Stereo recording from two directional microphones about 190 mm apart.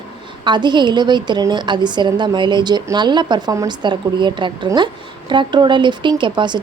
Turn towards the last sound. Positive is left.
turn(degrees=-25)  # may be behind; listen again after turning